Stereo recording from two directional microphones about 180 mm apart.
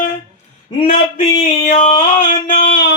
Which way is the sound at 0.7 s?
30° left (ahead or behind).